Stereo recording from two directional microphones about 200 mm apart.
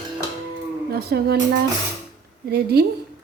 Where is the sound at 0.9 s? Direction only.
50° right (ahead or behind).